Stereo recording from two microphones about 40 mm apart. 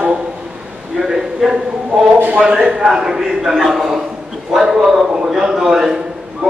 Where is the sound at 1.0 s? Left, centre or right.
Centre.